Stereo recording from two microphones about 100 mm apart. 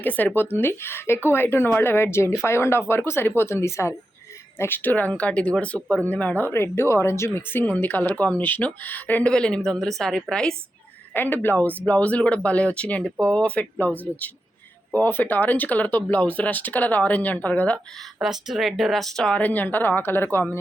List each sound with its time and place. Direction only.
0.0 s a woman's voice: 15° left (ahead or behind)
11.1 s speech: 20° left (ahead or behind)
18.2 s speech: 5° right (ahead or behind); by 20.6 s 20° left (ahead or behind)